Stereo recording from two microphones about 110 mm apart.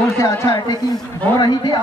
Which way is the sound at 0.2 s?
30° left (ahead or behind).